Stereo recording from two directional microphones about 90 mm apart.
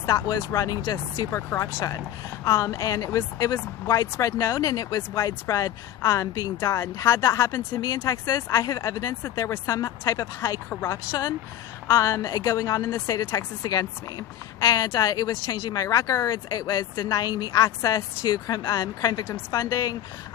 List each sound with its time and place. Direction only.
0.0 s speech: 45° left (ahead or behind)
1.4 s speech: 35° left (ahead or behind)